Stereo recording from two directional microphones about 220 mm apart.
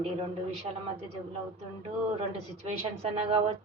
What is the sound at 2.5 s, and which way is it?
A woman's voice, 30° right (ahead or behind).